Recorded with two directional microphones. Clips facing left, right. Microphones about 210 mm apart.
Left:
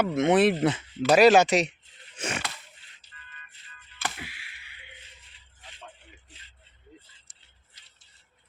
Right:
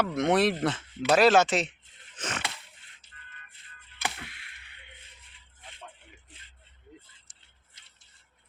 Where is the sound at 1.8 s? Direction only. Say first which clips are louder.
Left 4 dB; 50° right (ahead or behind).